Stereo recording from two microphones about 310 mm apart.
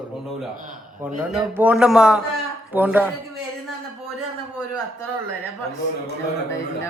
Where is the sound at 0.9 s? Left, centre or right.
Centre.